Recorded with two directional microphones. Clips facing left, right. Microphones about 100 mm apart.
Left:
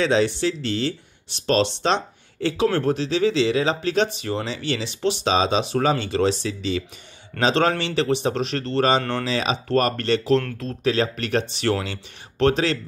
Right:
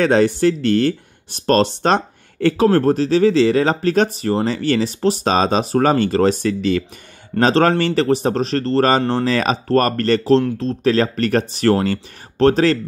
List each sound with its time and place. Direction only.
0.0 s speech: 50° right (ahead or behind)